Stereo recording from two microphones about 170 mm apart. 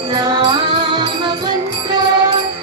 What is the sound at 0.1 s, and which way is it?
Music, 25° right (ahead or behind).